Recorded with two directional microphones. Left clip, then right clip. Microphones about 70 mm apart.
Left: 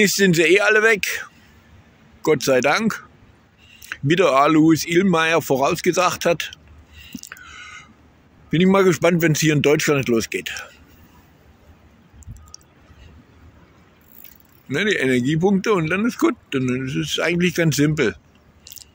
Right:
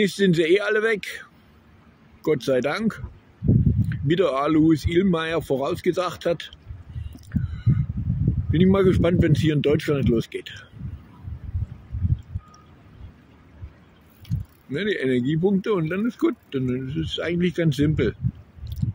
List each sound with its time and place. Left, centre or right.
0.0 s speech: right
7.2 s a sound: right
8.5 s speech: right
14.7 s speech: right